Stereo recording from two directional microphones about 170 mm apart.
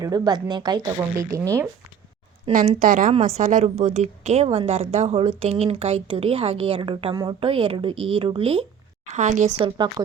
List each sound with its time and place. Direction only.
0.0 s speech: 25° right (ahead or behind)
2.7 s a woman's voice: 55° right (ahead or behind); by 8.6 s 30° right (ahead or behind)
9.0 s a woman's voice: 45° right (ahead or behind)
9.6 s speech: 25° right (ahead or behind)